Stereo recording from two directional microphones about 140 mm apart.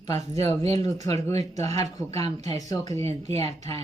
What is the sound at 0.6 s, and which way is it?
Speech, 45° right (ahead or behind).